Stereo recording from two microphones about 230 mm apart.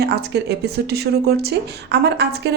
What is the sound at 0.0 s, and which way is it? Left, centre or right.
A woman's voice, right.